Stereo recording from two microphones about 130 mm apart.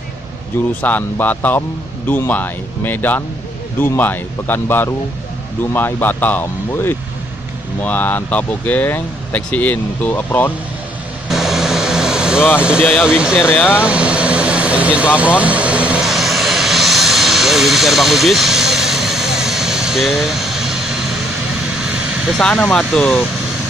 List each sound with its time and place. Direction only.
0.8 s speech: 15° left (ahead or behind)
11.2 s vehicle: centre (ahead or behind)
12.5 s speech: 5° right (ahead or behind)
13.7 s vehicle: 10° right (ahead or behind)
22.4 s speech: 5° left (ahead or behind)